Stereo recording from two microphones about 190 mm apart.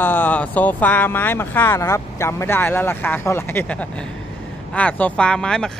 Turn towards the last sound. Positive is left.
turn(degrees=5)  # may be behind; listen again after turning